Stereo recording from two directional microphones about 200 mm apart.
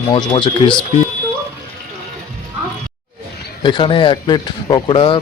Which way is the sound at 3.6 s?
25° left (ahead or behind).